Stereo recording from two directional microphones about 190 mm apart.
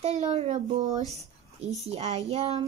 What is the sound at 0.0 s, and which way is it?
Speech, 35° right (ahead or behind).